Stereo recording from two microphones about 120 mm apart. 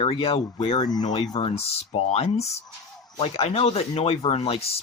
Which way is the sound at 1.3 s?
50° left (ahead or behind).